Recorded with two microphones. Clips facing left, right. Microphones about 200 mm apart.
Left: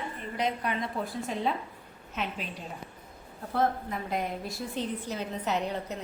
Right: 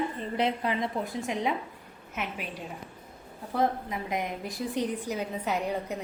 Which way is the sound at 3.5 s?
15° right (ahead or behind).